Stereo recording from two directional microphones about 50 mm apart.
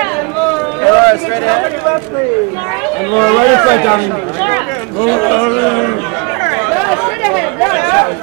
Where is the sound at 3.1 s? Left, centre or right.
Centre.